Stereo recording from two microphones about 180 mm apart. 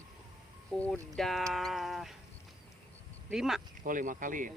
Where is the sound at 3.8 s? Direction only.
45° right (ahead or behind).